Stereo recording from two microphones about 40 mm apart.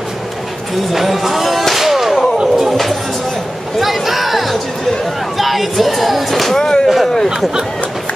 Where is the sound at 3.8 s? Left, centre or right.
Centre.